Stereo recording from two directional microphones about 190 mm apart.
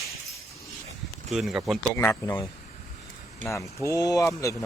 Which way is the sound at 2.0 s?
15° left (ahead or behind).